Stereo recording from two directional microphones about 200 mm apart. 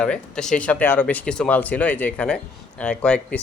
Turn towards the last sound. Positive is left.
turn(degrees=5)  # may be behind; listen again after turning